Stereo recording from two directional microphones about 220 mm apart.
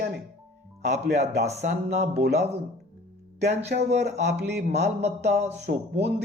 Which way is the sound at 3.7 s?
50° right (ahead or behind).